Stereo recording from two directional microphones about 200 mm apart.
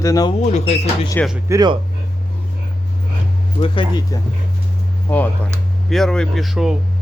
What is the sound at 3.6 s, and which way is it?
Speech, 25° left (ahead or behind).